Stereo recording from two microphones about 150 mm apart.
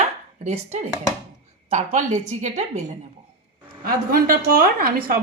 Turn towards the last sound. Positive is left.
turn(degrees=-80)